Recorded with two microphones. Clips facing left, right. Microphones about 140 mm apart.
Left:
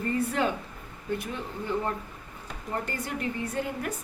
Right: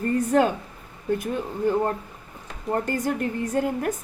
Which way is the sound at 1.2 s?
45° right (ahead or behind).